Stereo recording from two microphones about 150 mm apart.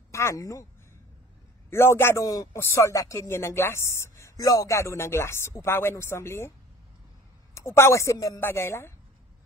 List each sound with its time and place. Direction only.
0.1 s speech: 20° left (ahead or behind)
1.7 s a man's voice: 15° left (ahead or behind)
7.5 s a man's voice: 20° left (ahead or behind)